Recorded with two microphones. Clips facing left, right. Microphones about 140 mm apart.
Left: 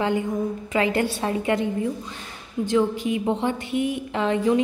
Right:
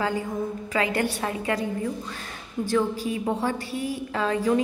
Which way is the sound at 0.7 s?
25° left (ahead or behind).